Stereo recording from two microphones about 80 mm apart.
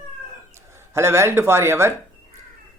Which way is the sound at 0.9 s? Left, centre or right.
Right.